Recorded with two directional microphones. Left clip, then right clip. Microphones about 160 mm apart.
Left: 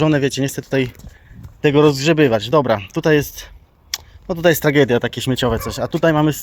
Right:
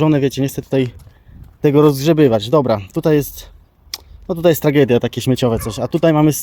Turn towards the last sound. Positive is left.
turn(degrees=-50)  # may be behind; listen again after turning